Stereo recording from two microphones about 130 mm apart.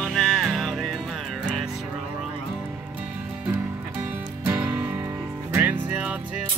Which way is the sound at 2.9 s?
10° right (ahead or behind).